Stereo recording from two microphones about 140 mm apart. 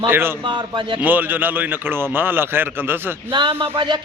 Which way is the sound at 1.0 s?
10° right (ahead or behind).